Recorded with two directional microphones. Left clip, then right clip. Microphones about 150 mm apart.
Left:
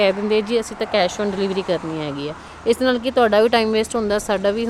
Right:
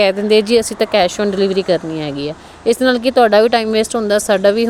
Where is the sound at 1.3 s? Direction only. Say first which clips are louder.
Right 7 dB; 30° right (ahead or behind).